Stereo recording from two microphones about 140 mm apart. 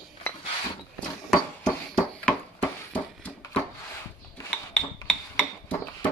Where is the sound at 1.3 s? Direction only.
5° left (ahead or behind).